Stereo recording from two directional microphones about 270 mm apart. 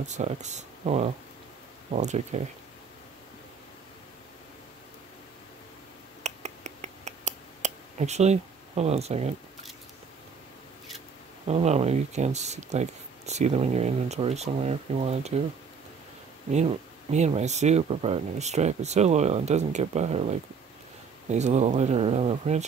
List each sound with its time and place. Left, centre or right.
0.0 s speech: right
6.2 s a sound: right
11.4 s speech: right
16.5 s speech: right